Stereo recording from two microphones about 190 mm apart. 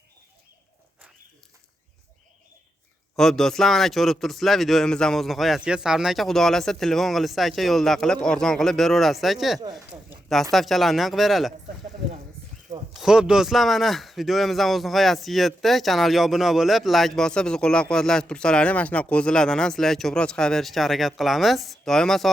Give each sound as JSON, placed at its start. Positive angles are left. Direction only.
{"t": 3.2, "sound": "a man's voice", "side_deg": 0}
{"t": 9.7, "sound": "a sound", "side_deg": -5}
{"t": 10.5, "sound": "a man's voice", "side_deg": 0}
{"t": 12.9, "sound": "a man's voice", "side_deg": 0}